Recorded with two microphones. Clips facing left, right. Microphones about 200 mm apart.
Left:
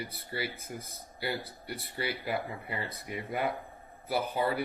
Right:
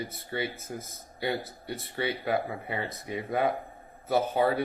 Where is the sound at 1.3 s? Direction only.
25° right (ahead or behind).